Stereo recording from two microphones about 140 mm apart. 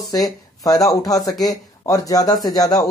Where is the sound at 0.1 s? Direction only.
25° left (ahead or behind).